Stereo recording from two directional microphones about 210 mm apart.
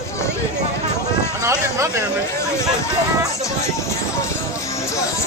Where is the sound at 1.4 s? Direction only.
15° right (ahead or behind).